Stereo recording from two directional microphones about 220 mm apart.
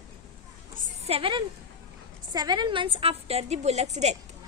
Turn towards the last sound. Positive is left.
turn(degrees=-30)  # may be behind; listen again after turning